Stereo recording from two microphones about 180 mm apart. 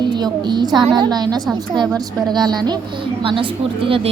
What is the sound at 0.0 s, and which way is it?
A woman's voice, 25° right (ahead or behind).